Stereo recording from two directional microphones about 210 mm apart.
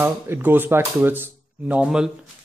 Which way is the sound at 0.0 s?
10° right (ahead or behind).